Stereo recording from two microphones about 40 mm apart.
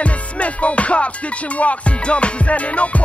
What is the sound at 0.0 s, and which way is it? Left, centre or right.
Music, left.